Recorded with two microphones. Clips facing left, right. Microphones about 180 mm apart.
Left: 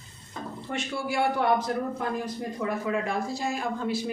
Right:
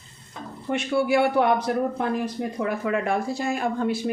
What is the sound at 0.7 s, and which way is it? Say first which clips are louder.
Speech: right 8 dB; 65° right (ahead or behind).